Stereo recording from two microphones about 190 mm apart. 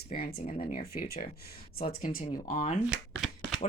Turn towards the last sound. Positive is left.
turn(degrees=0)  # may be behind; listen again after turning